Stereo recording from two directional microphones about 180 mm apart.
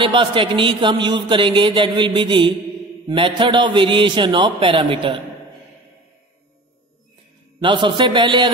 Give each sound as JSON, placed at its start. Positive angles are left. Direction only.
{"t": 0.0, "sound": "speech", "side_deg": -30}
{"t": 7.6, "sound": "speech", "side_deg": -25}